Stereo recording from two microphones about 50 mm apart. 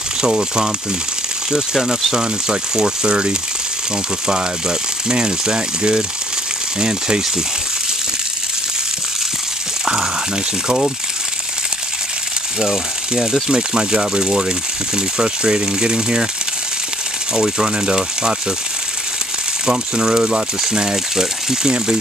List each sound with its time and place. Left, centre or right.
0.2 s speech: centre
12.5 s speech: centre
17.3 s speech: centre
19.6 s speech: centre